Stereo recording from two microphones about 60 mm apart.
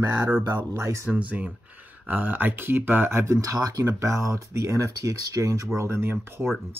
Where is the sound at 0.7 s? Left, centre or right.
Right.